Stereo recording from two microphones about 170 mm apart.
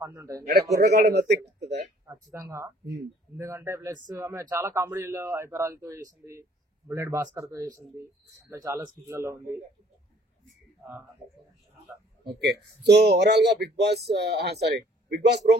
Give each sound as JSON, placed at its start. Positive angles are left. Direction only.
{"t": 0.0, "sound": "speech", "side_deg": -15}
{"t": 0.5, "sound": "speech", "side_deg": -75}
{"t": 1.4, "sound": "speech", "side_deg": -80}
{"t": 2.0, "sound": "speech", "side_deg": -15}
{"t": 12.4, "sound": "speech", "side_deg": -75}